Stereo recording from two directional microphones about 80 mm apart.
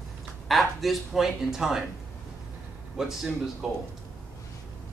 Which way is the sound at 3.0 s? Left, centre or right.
Centre.